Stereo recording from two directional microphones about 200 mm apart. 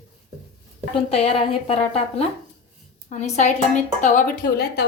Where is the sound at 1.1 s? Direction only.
30° left (ahead or behind).